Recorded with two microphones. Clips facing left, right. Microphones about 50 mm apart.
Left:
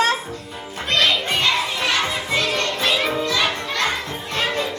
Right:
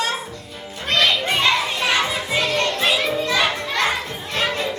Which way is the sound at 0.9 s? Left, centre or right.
Centre.